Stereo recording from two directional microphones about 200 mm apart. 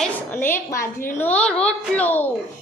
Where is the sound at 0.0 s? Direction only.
10° left (ahead or behind).